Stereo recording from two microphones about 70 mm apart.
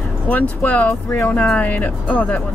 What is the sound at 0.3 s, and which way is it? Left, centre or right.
Speech, left.